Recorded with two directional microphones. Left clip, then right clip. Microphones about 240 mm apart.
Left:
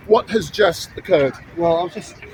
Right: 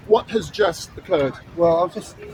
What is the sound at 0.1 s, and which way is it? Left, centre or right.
Speech, left.